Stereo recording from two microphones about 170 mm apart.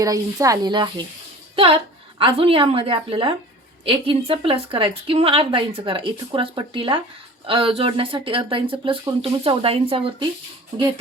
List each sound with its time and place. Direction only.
0.0 s speech: 20° right (ahead or behind)